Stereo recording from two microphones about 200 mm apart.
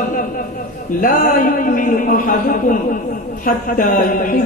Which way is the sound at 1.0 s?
45° left (ahead or behind).